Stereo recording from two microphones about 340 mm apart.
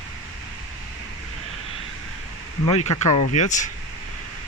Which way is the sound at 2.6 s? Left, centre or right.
Centre.